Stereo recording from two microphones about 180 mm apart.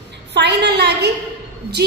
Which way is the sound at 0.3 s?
70° right (ahead or behind).